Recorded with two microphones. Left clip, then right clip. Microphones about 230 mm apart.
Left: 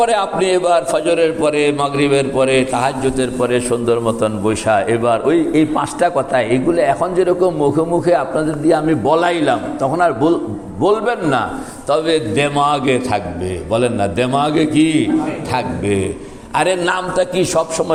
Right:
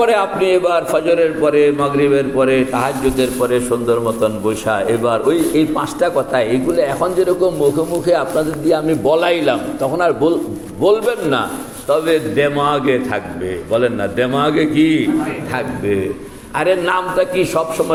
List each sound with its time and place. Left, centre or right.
0.0 s a man's voice: left